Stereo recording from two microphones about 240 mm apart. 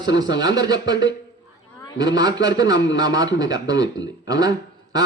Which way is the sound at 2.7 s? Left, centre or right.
Left.